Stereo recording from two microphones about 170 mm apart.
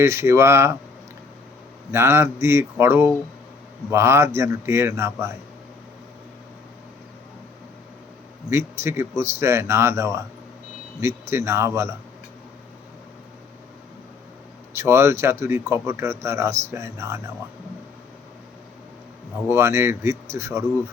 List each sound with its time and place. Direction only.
0.0 s speech: 15° right (ahead or behind)
1.9 s speech: 15° right (ahead or behind)
8.4 s speech: 15° right (ahead or behind)
14.8 s speech: 15° right (ahead or behind)
19.5 s speech: 15° right (ahead or behind)